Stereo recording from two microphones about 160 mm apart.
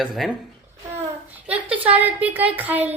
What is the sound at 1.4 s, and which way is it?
A child's voice, 10° right (ahead or behind).